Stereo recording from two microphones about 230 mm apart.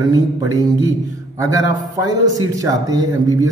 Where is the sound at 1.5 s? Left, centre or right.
Centre.